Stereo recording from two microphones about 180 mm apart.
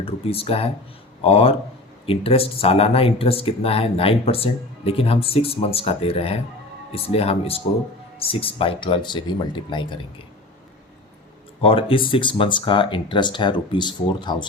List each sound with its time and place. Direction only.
0.0 s speech: 30° left (ahead or behind)
11.6 s speech: 30° left (ahead or behind)